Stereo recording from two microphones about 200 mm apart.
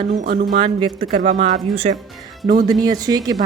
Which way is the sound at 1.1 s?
40° right (ahead or behind).